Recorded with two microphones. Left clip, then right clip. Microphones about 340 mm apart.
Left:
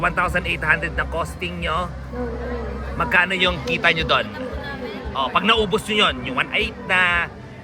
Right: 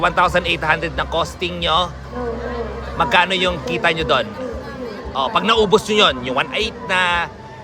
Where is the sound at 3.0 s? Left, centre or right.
Centre.